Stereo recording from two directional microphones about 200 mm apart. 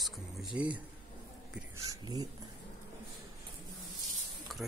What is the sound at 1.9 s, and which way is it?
Speech, 20° right (ahead or behind).